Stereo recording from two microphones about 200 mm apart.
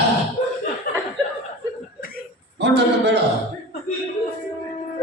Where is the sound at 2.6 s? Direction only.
55° right (ahead or behind).